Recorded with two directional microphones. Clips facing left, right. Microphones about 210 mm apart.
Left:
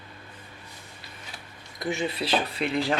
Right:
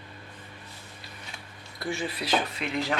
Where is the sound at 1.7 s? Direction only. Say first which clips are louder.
Left 3 dB; 20° left (ahead or behind).